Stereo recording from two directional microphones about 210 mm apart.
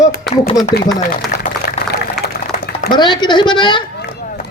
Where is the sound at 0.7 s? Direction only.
50° left (ahead or behind).